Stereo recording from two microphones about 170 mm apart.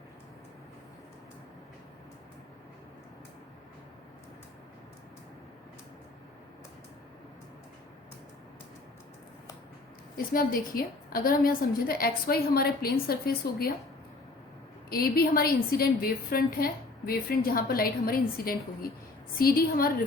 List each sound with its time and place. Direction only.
10.2 s a woman's voice: 55° left (ahead or behind)
14.8 s a woman's voice: 60° left (ahead or behind)